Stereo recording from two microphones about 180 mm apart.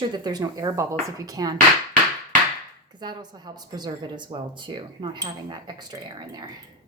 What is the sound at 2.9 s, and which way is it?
Speech, 25° right (ahead or behind).